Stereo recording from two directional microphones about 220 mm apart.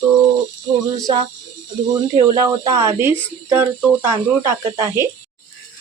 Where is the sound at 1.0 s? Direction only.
20° right (ahead or behind).